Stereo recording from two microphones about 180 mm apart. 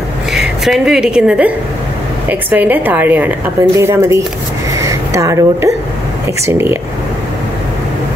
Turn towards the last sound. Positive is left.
turn(degrees=-10)  # may be behind; listen again after turning